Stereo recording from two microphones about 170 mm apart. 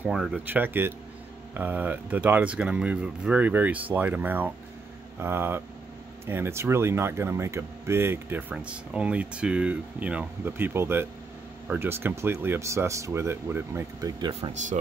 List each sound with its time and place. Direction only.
0.0 s speech: 5° right (ahead or behind)